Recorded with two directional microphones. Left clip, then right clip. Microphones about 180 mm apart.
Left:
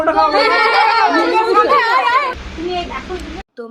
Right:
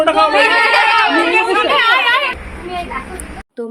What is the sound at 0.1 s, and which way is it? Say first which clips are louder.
Singing: left 1 dB; 40° right (ahead or behind).